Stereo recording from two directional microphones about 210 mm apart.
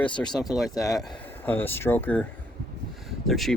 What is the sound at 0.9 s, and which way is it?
Speech, centre (ahead or behind).